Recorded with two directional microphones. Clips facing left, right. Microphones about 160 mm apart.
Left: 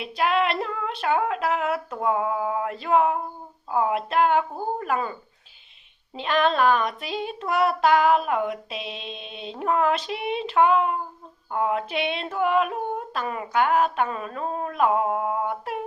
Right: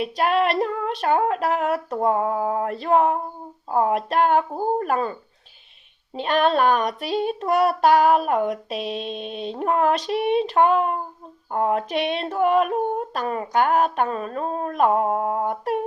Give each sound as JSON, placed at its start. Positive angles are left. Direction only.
{"t": 0.0, "sound": "child singing", "side_deg": -40}
{"t": 6.1, "sound": "child singing", "side_deg": -40}